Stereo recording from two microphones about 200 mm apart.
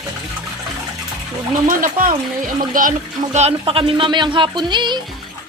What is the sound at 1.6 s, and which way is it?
Speech, 45° right (ahead or behind).